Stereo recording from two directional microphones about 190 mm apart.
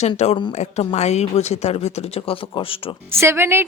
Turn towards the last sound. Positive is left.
turn(degrees=-10)  # may be behind; listen again after turning